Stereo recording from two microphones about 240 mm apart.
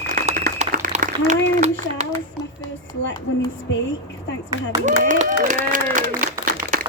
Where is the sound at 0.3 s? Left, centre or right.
Right.